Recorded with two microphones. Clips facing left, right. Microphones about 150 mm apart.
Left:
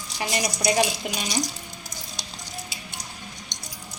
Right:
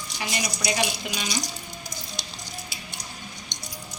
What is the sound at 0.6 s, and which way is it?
Speech, 45° left (ahead or behind).